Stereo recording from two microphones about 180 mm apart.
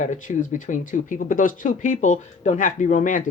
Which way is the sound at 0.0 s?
45° left (ahead or behind).